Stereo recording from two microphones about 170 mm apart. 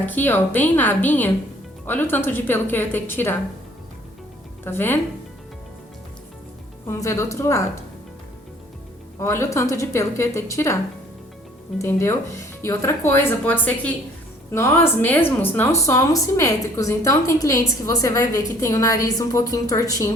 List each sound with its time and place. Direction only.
0.0 s speech: 10° left (ahead or behind)
4.6 s speech: 15° left (ahead or behind)
6.8 s speech: 15° left (ahead or behind)
9.1 s speech: 15° left (ahead or behind)
11.8 s speech: 15° left (ahead or behind)